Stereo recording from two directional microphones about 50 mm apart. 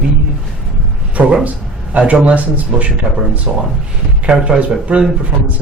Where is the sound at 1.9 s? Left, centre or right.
Right.